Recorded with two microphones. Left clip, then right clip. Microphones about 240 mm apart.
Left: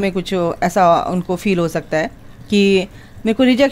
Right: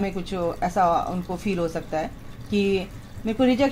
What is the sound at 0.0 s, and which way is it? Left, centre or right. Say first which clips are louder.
A woman's voice: left 8 dB; left.